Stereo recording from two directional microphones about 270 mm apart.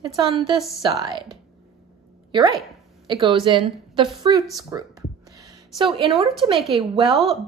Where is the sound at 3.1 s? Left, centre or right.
Centre.